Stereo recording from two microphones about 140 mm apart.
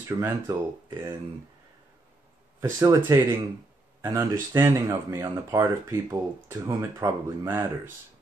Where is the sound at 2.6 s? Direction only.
20° right (ahead or behind).